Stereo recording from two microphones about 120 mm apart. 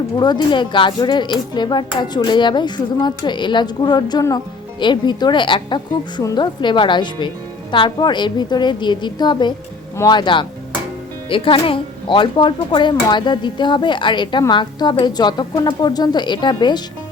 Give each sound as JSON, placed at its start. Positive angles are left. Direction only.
{"t": 0.2, "sound": "speech", "side_deg": 40}